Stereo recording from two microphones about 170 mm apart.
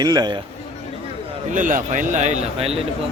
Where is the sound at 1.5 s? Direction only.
50° right (ahead or behind).